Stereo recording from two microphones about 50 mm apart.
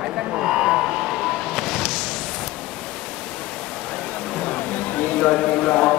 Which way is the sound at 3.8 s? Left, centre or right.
Centre.